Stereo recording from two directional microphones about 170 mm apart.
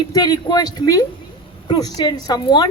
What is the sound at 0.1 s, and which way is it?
A woman's voice, 20° left (ahead or behind).